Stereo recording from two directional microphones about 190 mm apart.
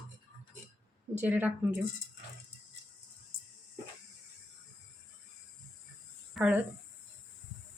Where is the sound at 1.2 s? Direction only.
10° right (ahead or behind).